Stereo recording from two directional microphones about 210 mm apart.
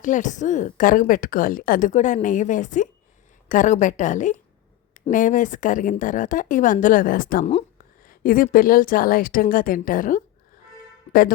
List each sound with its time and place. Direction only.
0.0 s a woman's voice: 35° left (ahead or behind)